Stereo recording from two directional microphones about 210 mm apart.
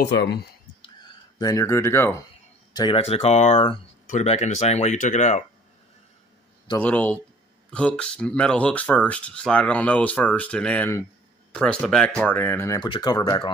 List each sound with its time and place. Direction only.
0.1 s speech: 55° left (ahead or behind)
0.8 s a sound: 20° left (ahead or behind)
2.7 s speech: 20° left (ahead or behind)
6.8 s speech: 5° left (ahead or behind)